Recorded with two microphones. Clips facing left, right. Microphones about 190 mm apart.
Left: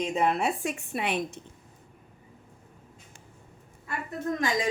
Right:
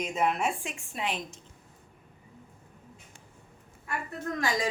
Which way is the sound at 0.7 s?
65° left (ahead or behind).